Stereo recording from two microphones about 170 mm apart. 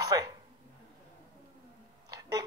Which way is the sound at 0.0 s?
20° right (ahead or behind).